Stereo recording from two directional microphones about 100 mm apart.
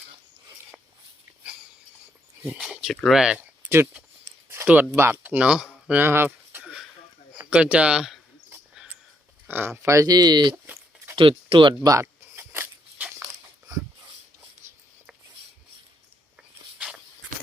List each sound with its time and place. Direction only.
2.6 s speech: 5° right (ahead or behind)
4.9 s speech: 25° right (ahead or behind); by 5.6 s 10° right (ahead or behind)
5.9 s a sound: 20° right (ahead or behind)
7.3 s speech: 10° right (ahead or behind)
8.7 s a sound: 5° right (ahead or behind)
9.5 s speech: 20° right (ahead or behind); by 10.5 s 45° right (ahead or behind)
10.5 s a sound: 20° right (ahead or behind)
11.2 s speech: 65° right (ahead or behind)
11.8 s speech: 35° right (ahead or behind)
12.4 s biting: 20° right (ahead or behind)
14.6 s writing: 30° right (ahead or behind)
16.7 s walk: 10° right (ahead or behind)